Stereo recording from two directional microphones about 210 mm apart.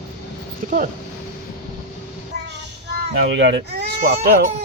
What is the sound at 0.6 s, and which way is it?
Speech, 40° right (ahead or behind).